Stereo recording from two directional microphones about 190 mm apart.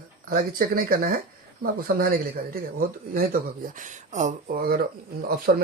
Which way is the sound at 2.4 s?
55° right (ahead or behind).